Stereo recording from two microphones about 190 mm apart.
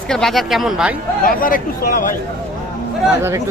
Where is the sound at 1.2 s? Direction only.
50° left (ahead or behind).